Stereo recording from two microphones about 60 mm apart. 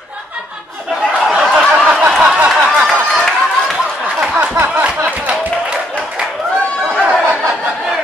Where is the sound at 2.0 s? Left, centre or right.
Centre.